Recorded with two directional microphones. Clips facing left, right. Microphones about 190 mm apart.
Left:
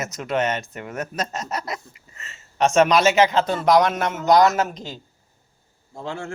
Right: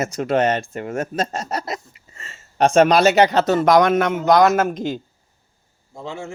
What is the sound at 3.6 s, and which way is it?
A man's voice, 50° right (ahead or behind).